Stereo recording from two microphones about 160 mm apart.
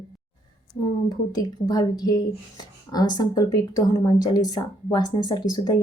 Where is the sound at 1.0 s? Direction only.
25° left (ahead or behind).